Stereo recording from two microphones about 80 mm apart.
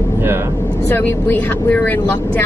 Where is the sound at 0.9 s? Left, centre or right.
Left.